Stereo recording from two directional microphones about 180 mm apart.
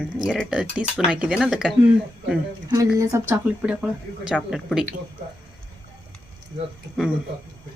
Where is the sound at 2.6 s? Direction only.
20° right (ahead or behind).